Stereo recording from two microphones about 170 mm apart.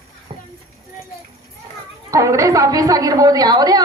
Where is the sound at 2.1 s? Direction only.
20° right (ahead or behind).